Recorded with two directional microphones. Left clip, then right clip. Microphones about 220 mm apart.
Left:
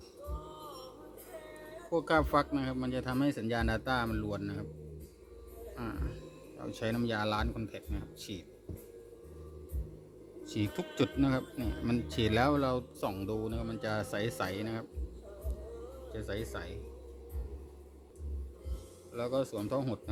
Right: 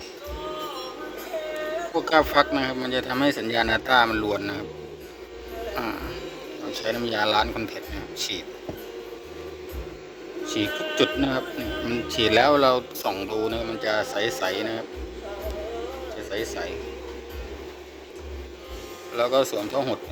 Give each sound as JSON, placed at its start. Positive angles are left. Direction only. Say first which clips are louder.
{"t": 2.0, "sound": "speech", "louder": "right 9 dB", "side_deg": 30}
{"t": 6.7, "sound": "speech", "louder": "right 8 dB", "side_deg": 35}
{"t": 10.4, "sound": "speech", "louder": "right 11 dB", "side_deg": 35}
{"t": 16.3, "sound": "speech", "louder": "right 11 dB", "side_deg": 40}
{"t": 19.1, "sound": "speech", "louder": "right 12 dB", "side_deg": 30}